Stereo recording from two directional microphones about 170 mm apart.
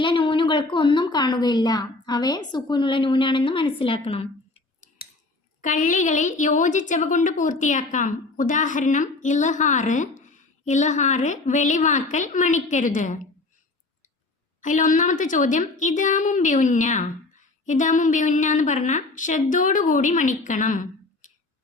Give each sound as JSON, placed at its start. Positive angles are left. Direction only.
{"t": 0.0, "sound": "speech", "side_deg": 30}
{"t": 5.6, "sound": "a woman's voice", "side_deg": 50}
{"t": 14.6, "sound": "a woman's voice", "side_deg": 50}